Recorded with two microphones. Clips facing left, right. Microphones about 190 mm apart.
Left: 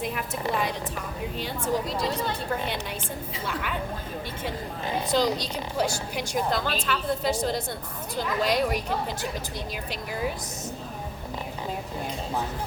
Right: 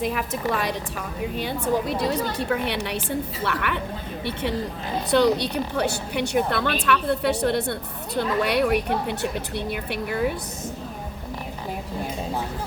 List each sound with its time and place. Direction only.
0.1 s a woman's voice: 85° right
1.4 s a woman's voice: 65° right (ahead or behind)
5.1 s a woman's voice: 65° right (ahead or behind)